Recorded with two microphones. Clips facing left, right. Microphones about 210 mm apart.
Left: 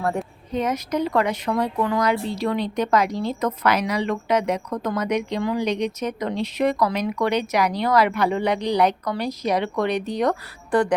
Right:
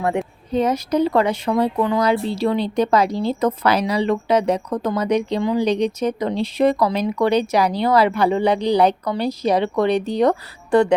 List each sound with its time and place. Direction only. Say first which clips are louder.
0.5 s a woman's voice: right 5 dB; 30° right (ahead or behind)